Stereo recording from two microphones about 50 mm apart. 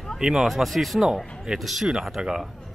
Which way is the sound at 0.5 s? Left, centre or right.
Centre.